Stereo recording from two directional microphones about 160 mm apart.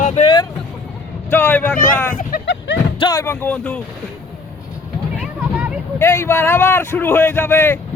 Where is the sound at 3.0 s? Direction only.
20° left (ahead or behind).